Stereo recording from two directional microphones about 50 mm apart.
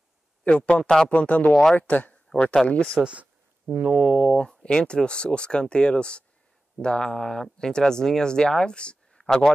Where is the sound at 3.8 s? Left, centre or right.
Right.